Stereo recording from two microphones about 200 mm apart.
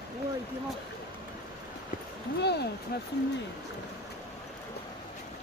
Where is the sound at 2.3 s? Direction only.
55° left (ahead or behind).